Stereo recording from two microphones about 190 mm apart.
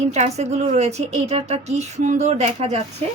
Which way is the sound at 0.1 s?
35° right (ahead or behind).